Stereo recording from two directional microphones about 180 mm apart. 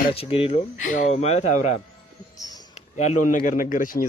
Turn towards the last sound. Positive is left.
turn(degrees=50)  # may be behind; listen again after turning